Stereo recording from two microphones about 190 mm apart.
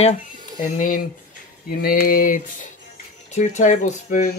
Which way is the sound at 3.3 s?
40° left (ahead or behind).